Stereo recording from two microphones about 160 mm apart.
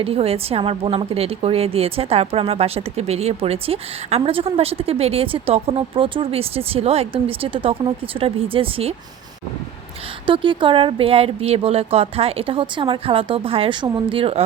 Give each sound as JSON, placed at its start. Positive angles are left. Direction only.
{"t": 0.0, "sound": "a woman's voice", "side_deg": -40}
{"t": 10.2, "sound": "a woman's voice", "side_deg": -30}